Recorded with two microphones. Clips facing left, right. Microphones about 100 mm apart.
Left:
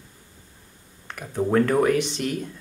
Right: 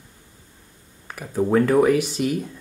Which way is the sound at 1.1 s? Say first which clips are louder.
Right 2 dB; 5° right (ahead or behind).